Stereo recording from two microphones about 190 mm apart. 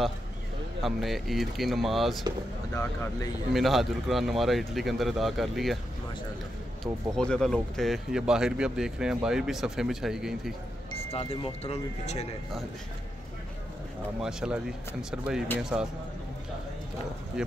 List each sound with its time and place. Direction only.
0.8 s speech: centre (ahead or behind)
3.5 s speech: centre (ahead or behind)
6.8 s speech: 5° left (ahead or behind)
11.1 s speech: 30° left (ahead or behind)
14.2 s a man's voice: 5° right (ahead or behind)